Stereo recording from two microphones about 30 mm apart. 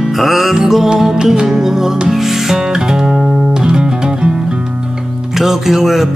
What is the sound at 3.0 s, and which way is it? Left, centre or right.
Music, right.